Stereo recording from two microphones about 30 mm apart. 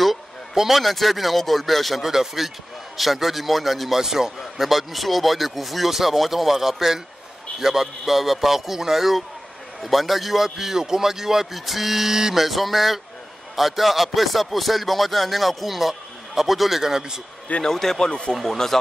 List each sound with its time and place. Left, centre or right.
0.6 s speech: centre
2.0 s a man's voice: centre
3.9 s a man's voice: centre
17.6 s speech: centre
18.0 s speech: left
18.3 s speech: centre